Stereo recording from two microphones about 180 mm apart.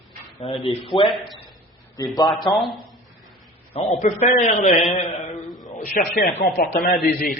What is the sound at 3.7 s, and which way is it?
A man's voice, 35° left (ahead or behind).